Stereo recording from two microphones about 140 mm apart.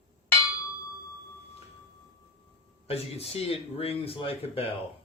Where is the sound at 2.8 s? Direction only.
45° left (ahead or behind).